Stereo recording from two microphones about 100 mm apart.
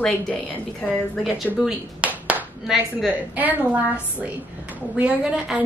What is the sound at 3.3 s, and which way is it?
A woman's voice, 15° right (ahead or behind).